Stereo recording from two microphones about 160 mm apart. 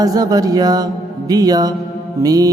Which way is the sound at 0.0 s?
25° right (ahead or behind).